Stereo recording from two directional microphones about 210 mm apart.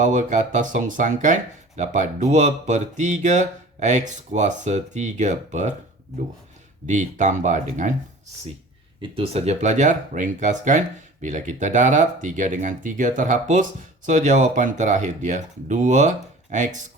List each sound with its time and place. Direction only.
0.0 s speech: 35° right (ahead or behind)
6.8 s speech: 35° right (ahead or behind)
9.0 s speech: 25° right (ahead or behind)